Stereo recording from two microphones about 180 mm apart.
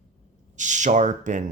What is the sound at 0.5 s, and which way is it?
Speech, 45° right (ahead or behind).